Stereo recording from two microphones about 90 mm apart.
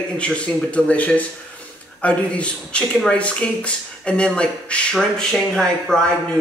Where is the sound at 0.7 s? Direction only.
15° left (ahead or behind).